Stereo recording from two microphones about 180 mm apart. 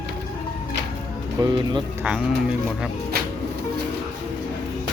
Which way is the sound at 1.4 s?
25° right (ahead or behind).